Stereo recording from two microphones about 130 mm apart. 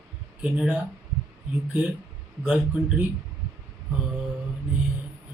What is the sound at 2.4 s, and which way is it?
Speech, 5° right (ahead or behind).